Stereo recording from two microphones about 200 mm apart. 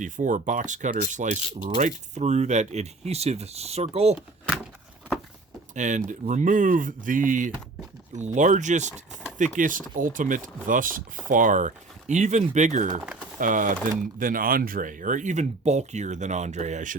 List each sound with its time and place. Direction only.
0.0 s speech: 40° right (ahead or behind)
5.7 s speech: 35° right (ahead or behind)